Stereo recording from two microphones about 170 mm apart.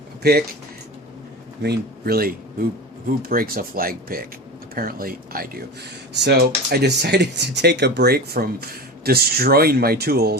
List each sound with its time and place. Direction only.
0.2 s speech: 65° right (ahead or behind)
1.6 s speech: 70° right (ahead or behind)
6.2 s speech: 70° right (ahead or behind)